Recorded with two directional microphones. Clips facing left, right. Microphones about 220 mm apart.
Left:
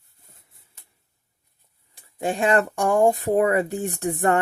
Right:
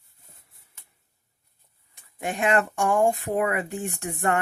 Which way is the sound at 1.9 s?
30° left (ahead or behind).